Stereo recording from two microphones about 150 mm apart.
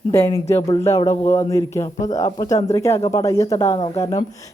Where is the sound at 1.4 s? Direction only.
20° left (ahead or behind).